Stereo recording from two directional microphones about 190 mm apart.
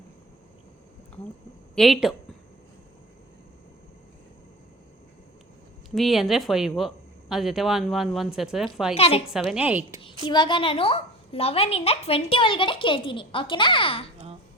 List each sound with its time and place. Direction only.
1.7 s speech: centre (ahead or behind)
5.9 s speech: centre (ahead or behind)
9.0 s a woman's voice: 30° left (ahead or behind)
9.3 s a woman's voice: 5° right (ahead or behind)
10.2 s a child's voice: 25° left (ahead or behind)